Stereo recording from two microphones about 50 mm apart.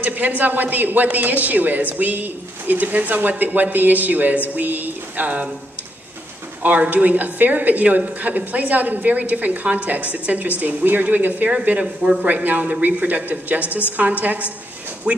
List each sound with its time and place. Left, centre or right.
0.0 s a woman's voice: right
6.6 s a woman's voice: right